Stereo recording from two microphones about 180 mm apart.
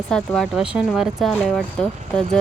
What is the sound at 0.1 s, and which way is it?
Speech, 5° left (ahead or behind).